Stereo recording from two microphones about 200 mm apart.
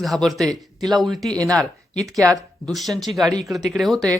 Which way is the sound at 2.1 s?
15° right (ahead or behind).